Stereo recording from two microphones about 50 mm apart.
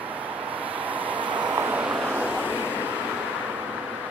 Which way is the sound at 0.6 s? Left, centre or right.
Right.